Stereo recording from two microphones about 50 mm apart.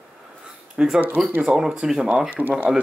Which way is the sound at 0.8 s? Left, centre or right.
Centre.